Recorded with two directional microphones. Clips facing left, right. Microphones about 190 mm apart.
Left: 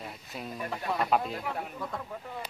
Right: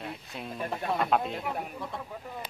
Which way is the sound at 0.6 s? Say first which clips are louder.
Right 2 dB; 25° right (ahead or behind).